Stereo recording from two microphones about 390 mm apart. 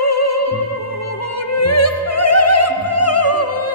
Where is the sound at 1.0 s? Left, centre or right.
Left.